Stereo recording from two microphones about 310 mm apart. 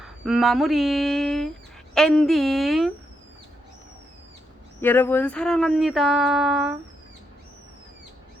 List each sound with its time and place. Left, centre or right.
0.0 s speech: centre
4.8 s speech: centre